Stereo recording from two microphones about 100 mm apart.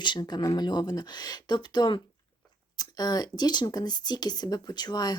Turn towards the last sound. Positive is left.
turn(degrees=45)  # may be behind; listen again after turning